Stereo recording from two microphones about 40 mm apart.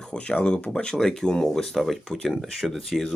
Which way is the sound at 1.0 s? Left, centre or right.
Centre.